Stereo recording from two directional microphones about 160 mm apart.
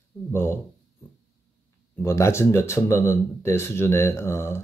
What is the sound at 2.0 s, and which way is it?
Speech, 15° left (ahead or behind).